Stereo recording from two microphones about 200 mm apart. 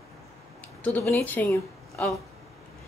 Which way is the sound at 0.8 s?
10° left (ahead or behind).